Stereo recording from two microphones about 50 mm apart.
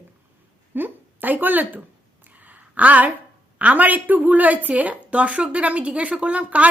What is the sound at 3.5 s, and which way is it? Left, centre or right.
A woman's voice, right.